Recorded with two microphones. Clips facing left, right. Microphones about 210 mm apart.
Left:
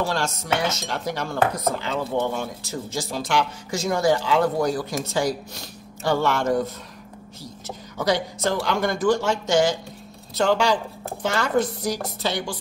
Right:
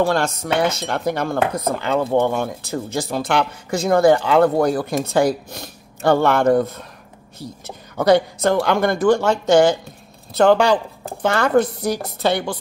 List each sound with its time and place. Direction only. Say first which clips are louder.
0.0 s dishes: right 7 dB; 55° right (ahead or behind)